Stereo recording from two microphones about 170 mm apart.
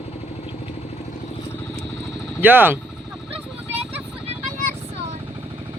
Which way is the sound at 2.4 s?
10° right (ahead or behind).